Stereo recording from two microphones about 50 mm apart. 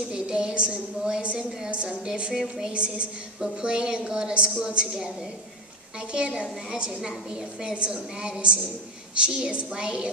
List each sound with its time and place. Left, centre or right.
0.1 s a woman's voice: centre
6.1 s a woman's voice: centre